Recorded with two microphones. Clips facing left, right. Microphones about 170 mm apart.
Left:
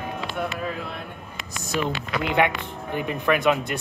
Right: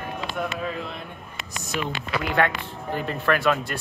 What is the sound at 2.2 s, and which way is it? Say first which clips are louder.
Speech: left 2 dB; 20° left (ahead or behind).